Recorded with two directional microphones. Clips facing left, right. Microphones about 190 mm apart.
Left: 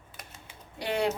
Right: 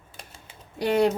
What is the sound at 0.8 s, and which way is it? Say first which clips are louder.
Speech: right 8 dB; 45° right (ahead or behind).